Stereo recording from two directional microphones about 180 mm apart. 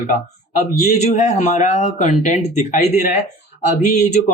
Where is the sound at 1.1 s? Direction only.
40° left (ahead or behind).